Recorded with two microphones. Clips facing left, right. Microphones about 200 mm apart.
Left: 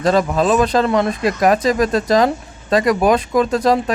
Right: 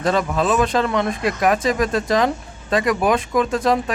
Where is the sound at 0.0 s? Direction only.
40° left (ahead or behind).